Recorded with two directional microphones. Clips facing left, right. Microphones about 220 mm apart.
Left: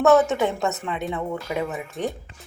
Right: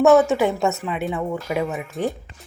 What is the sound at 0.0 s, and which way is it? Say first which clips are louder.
Speech: right 3 dB; 10° right (ahead or behind).